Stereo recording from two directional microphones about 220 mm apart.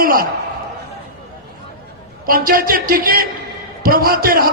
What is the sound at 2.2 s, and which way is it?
A man's voice, 40° right (ahead or behind).